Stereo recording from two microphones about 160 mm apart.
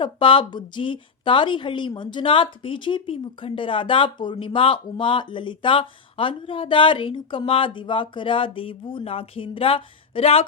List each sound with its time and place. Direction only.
0.0 s a woman's voice: 30° left (ahead or behind)